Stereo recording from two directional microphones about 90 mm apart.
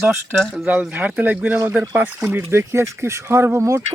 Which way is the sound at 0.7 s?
20° right (ahead or behind).